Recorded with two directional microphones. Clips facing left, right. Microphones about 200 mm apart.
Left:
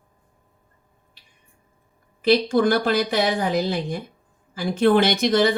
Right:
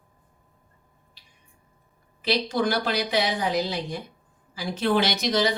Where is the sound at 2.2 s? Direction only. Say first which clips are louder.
Left 7 dB; 50° left (ahead or behind).